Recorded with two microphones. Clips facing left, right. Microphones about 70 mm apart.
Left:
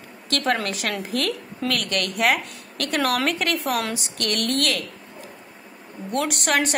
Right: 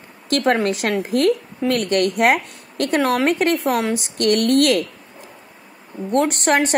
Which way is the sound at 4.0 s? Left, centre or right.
Right.